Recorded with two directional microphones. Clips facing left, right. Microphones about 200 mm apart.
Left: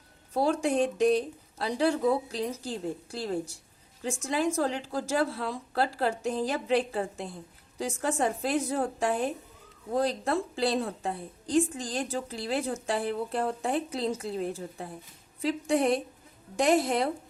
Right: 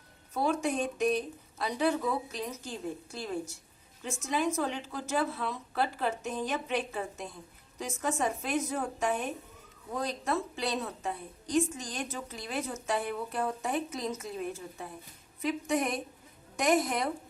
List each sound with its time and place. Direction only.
0.3 s a woman's voice: 30° left (ahead or behind)